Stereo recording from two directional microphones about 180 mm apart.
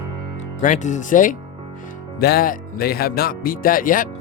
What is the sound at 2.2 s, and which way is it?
Speech, 60° left (ahead or behind).